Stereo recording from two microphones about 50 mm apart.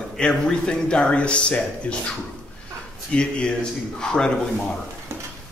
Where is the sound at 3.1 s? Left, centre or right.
Centre.